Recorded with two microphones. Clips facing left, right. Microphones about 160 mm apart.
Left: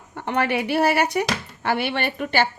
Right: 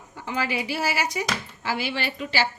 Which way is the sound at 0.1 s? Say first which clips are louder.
Left 5 dB; 65° left (ahead or behind).